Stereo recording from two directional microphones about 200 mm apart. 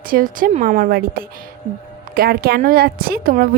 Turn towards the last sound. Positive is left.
turn(degrees=-45)  # may be behind; listen again after turning